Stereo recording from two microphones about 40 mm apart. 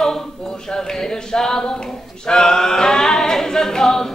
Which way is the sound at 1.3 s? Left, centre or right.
Centre.